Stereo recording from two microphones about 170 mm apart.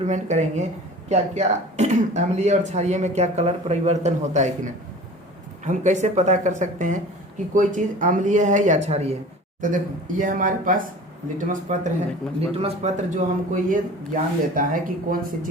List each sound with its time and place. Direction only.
0.0 s speech: 45° right (ahead or behind)
5.6 s speech: 45° right (ahead or behind)
9.6 s speech: 50° right (ahead or behind)
12.4 s speech: 40° right (ahead or behind)